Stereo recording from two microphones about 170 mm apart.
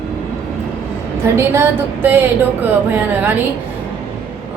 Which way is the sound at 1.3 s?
15° right (ahead or behind).